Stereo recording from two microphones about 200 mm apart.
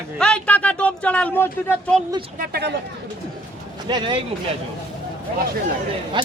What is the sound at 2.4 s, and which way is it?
Speech, 50° right (ahead or behind).